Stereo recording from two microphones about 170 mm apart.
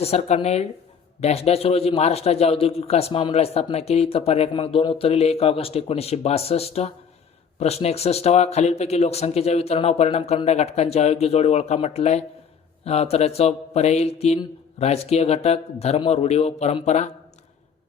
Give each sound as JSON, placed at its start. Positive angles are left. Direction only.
{"t": 0.0, "sound": "a man's voice", "side_deg": 40}